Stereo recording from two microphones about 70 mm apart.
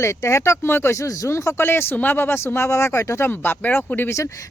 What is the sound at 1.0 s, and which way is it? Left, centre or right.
Speech, left.